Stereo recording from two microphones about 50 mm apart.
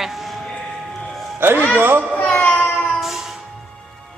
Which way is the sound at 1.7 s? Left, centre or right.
Right.